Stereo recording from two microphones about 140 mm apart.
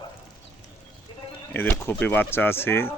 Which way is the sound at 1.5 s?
15° left (ahead or behind).